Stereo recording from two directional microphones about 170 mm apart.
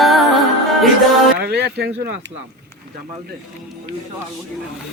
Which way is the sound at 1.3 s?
70° right (ahead or behind).